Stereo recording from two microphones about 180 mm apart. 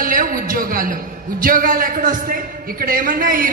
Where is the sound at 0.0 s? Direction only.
50° right (ahead or behind).